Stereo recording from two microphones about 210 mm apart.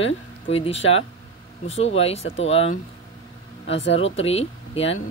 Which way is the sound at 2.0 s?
30° left (ahead or behind).